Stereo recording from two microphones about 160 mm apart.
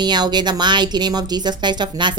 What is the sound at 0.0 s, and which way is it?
Speech, 25° right (ahead or behind).